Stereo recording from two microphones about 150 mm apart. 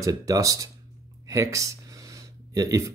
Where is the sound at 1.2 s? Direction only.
20° right (ahead or behind).